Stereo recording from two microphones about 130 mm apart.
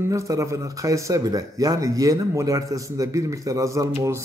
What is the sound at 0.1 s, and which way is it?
A man's voice, 25° right (ahead or behind).